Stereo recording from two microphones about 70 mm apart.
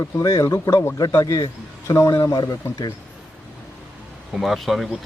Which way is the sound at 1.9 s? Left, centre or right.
Left.